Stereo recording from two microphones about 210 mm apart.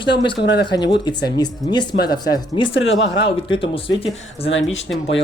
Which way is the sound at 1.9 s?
50° left (ahead or behind).